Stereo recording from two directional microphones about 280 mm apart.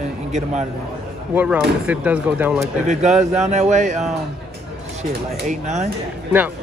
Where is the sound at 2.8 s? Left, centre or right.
Right.